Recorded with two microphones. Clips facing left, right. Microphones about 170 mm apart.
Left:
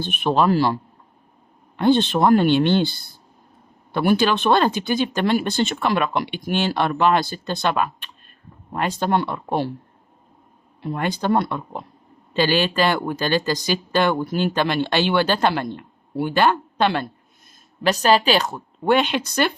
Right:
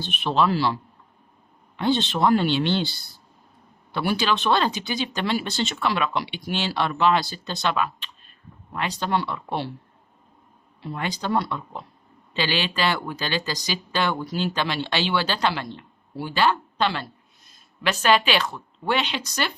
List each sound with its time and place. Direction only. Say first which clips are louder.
0.0 s speech: left 3 dB; 50° left (ahead or behind)
10.8 s speech: left 5 dB; 50° left (ahead or behind)
17.8 s speech: left 4 dB; 40° left (ahead or behind); by 19.5 s 55° left (ahead or behind)